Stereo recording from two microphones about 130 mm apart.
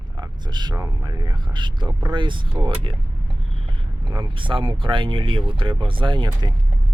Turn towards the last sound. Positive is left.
turn(degrees=-40)  # may be behind; listen again after turning